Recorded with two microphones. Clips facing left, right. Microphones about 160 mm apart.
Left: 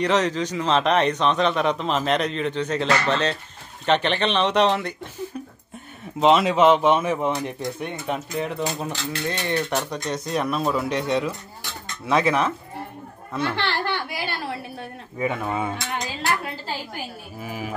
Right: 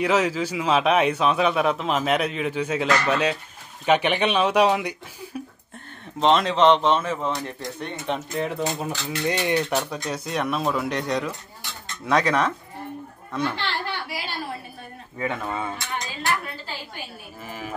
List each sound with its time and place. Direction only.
0.0 s a man's voice: 5° right (ahead or behind)
6.1 s speech: 5° left (ahead or behind)
8.3 s speech: centre (ahead or behind)
9.3 s speech: 10° right (ahead or behind); by 12.5 s 5° left (ahead or behind)
13.6 s a child's voice: 65° left (ahead or behind)
15.1 s speech: 10° left (ahead or behind)
17.4 s speech: 10° left (ahead or behind)